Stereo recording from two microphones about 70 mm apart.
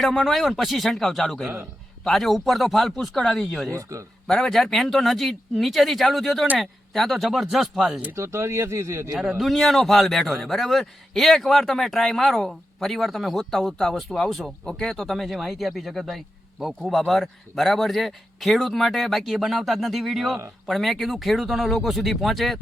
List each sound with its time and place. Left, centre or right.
0.0 s a man's voice: centre
3.7 s a man's voice: right
4.3 s a man's voice: centre
8.1 s speech: right
9.4 s a man's voice: centre